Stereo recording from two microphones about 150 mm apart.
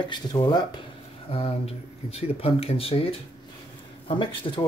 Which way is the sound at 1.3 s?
40° left (ahead or behind).